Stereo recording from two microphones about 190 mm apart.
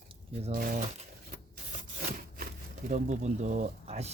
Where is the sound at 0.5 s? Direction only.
45° right (ahead or behind).